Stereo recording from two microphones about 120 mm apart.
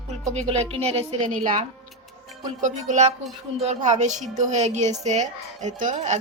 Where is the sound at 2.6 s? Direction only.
80° right.